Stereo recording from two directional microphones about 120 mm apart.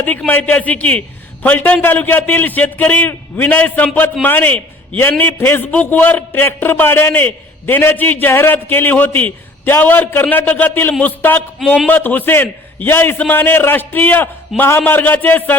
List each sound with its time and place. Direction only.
0.3 s a man's voice: 10° left (ahead or behind)